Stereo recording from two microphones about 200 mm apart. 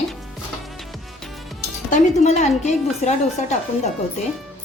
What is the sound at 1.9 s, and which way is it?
Speech, 35° left (ahead or behind).